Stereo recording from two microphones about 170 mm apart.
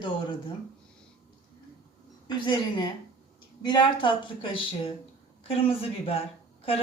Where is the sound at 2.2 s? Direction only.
25° left (ahead or behind).